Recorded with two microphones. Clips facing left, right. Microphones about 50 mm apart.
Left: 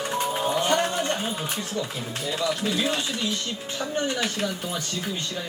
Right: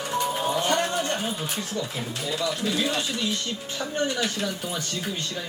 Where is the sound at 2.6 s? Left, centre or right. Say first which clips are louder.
Even; left.